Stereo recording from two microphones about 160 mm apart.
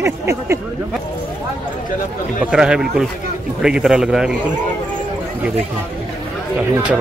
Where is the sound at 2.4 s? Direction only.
5° right (ahead or behind).